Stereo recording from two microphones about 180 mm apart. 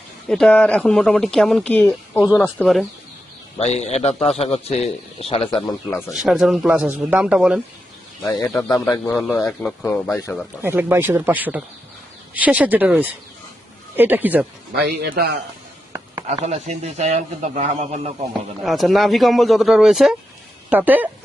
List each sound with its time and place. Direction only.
0.3 s speech: 5° left (ahead or behind)
2.4 s speech: centre (ahead or behind)
3.6 s a man's voice: 40° left (ahead or behind)
6.1 s speech: centre (ahead or behind)
8.2 s speech: 15° left (ahead or behind)
9.4 s speech: centre (ahead or behind)
10.6 s speech: 10° right (ahead or behind)
14.8 s a man's voice: 60° right (ahead or behind)
16.4 s speech: 35° right (ahead or behind)
18.6 s speech: centre (ahead or behind)